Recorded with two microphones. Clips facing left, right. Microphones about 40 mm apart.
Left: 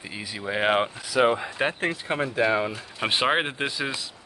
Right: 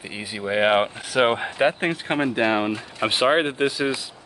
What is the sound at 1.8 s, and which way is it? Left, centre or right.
Speech, right.